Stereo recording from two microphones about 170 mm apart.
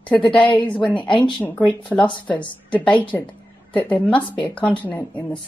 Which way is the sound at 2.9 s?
10° left (ahead or behind).